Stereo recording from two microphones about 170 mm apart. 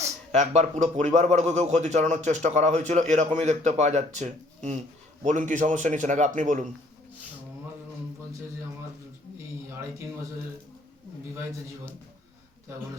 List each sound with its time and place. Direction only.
0.3 s a man's voice: 45° right (ahead or behind)